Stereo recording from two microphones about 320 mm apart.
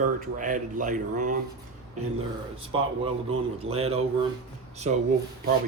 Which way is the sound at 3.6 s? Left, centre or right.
Centre.